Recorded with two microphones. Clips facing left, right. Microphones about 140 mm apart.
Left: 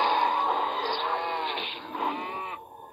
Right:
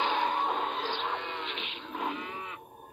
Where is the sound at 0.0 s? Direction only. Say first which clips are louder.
Left 4 dB; 55° left (ahead or behind).